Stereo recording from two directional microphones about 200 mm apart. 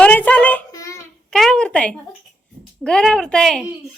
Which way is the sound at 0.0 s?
10° left (ahead or behind).